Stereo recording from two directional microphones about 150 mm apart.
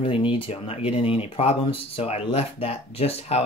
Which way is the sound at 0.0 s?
35° left (ahead or behind).